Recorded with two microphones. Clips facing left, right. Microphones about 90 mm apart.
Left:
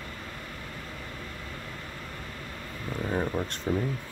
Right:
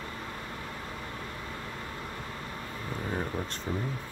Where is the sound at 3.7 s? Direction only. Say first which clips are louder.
Left 6 dB; 55° left (ahead or behind).